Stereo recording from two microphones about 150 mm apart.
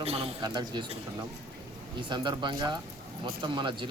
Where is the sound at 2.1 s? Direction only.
30° right (ahead or behind).